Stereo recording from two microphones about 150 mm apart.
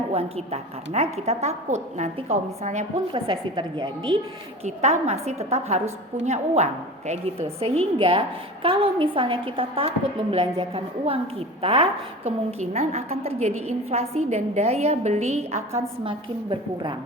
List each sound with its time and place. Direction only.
0.1 s a woman's voice: 45° right (ahead or behind)
3.1 s a woman's voice: 30° right (ahead or behind)
4.6 s a woman's voice: 45° right (ahead or behind)
16.0 s a woman's voice: 35° right (ahead or behind)